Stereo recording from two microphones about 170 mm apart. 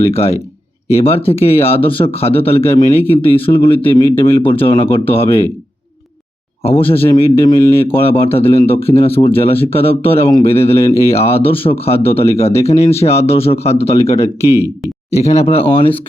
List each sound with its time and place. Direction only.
0.0 s speech: 35° left (ahead or behind)
6.6 s speech: 35° left (ahead or behind)